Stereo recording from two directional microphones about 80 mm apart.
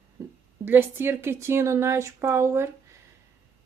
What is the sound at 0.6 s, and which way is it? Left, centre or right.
Speech, right.